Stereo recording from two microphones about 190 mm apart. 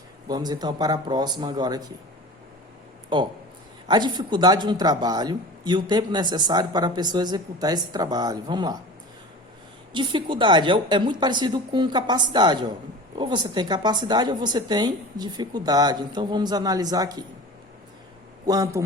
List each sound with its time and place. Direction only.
0.3 s speech: 20° right (ahead or behind)
3.1 s speech: 25° right (ahead or behind)
9.9 s speech: 25° right (ahead or behind)
18.4 s speech: 20° right (ahead or behind)